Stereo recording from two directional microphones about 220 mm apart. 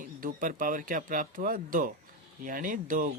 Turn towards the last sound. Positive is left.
turn(degrees=-40)  # may be behind; listen again after turning